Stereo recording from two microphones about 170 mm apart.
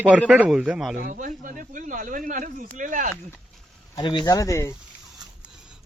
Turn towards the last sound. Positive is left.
turn(degrees=-5)  # may be behind; listen again after turning